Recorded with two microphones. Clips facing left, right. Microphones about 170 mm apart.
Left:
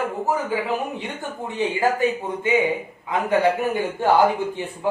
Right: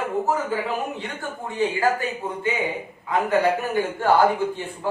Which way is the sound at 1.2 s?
20° left (ahead or behind).